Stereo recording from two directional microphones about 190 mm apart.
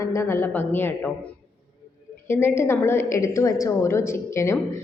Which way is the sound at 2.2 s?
10° left (ahead or behind).